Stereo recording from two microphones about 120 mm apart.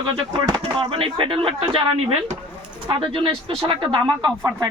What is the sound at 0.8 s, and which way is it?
Speech, 50° right (ahead or behind).